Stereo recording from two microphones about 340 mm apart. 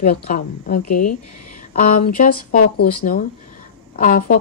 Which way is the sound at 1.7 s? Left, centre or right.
Left.